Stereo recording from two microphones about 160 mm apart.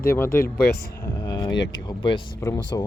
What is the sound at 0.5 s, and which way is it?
Speech, 85° left.